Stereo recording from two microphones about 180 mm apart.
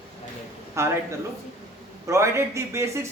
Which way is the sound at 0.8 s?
15° right (ahead or behind).